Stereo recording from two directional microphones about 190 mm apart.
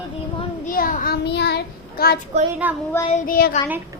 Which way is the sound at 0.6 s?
45° left (ahead or behind).